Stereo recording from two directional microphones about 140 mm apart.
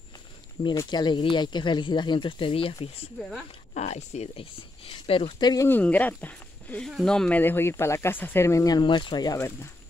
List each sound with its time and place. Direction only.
0.8 s speech: 30° left (ahead or behind)
3.7 s speech: 55° left (ahead or behind)
5.5 s speech: 20° left (ahead or behind)
5.8 s speech: 10° left (ahead or behind); by 9.4 s 30° left (ahead or behind)